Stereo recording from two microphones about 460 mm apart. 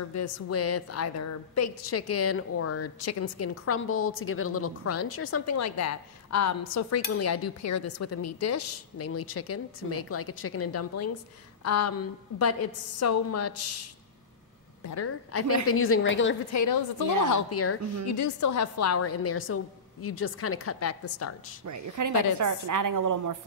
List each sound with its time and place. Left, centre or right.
0.1 s a woman's voice: left
14.8 s a woman's voice: left
16.5 s a woman's voice: left
17.3 s a woman's voice: left
21.6 s a woman's voice: right